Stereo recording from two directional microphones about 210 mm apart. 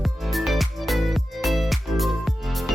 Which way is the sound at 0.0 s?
Centre (ahead or behind).